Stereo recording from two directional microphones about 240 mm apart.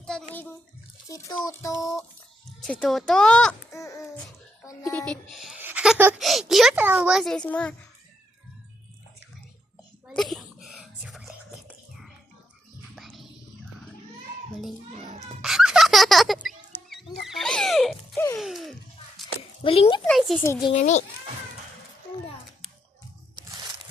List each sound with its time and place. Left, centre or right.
0.0 s bathtub: centre
1.0 s a child's voice: centre
1.8 s a child's voice: centre
4.9 s a child's voice: centre
10.1 s a sound: centre
11.7 s music: centre
15.4 s music: centre
16.5 s wild animals: centre
18.3 s a sound: centre
19.6 s speech: left
20.1 s a child's voice: centre
20.7 s speech: left